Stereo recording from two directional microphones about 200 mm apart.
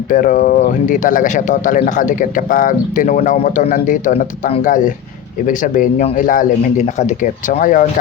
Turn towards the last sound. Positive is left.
turn(degrees=40)  # may be behind; listen again after turning